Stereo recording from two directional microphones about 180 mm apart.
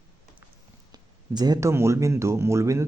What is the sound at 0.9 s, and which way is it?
Speech, 20° right (ahead or behind).